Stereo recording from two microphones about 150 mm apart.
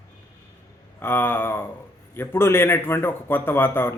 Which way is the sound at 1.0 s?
15° left (ahead or behind).